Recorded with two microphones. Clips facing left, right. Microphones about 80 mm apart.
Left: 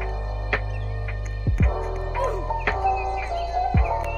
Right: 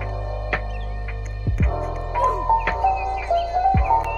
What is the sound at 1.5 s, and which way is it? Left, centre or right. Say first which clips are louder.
Music: right 1 dB; centre.